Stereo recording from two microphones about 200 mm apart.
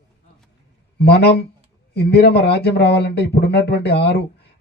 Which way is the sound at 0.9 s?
55° left (ahead or behind).